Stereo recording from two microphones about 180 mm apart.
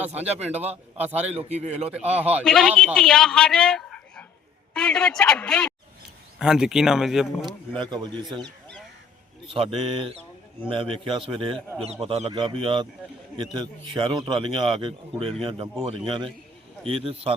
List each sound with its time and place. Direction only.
0.0 s a man's voice: 10° right (ahead or behind)
1.4 s a man's voice: 35° right (ahead or behind)
2.4 s a man's voice: 5° left (ahead or behind)
7.7 s speech: 25° right (ahead or behind)
9.5 s speech: 30° right (ahead or behind)
13.9 s a man's voice: 25° right (ahead or behind)